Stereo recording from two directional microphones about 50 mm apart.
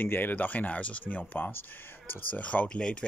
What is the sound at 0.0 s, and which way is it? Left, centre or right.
Speech, left.